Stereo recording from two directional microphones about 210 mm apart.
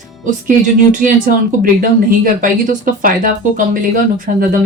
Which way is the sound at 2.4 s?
40° right (ahead or behind).